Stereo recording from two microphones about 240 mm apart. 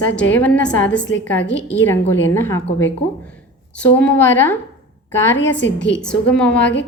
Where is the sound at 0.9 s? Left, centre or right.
Left.